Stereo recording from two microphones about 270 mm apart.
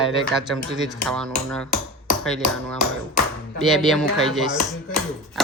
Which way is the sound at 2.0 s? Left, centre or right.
Centre.